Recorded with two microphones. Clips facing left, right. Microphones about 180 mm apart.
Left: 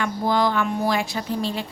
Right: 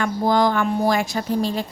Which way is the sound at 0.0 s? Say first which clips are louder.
Right 3 dB; 45° right (ahead or behind).